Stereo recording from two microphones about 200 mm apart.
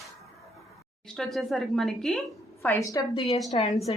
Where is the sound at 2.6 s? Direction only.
15° left (ahead or behind).